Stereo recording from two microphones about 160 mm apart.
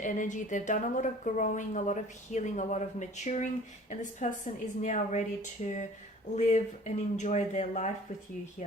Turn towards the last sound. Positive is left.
turn(degrees=45)  # may be behind; listen again after turning